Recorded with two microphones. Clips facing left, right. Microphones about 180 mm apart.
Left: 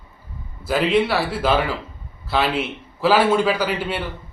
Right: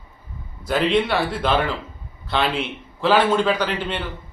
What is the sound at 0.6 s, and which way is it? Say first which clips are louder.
A man's voice: left 1 dB; 5° left (ahead or behind).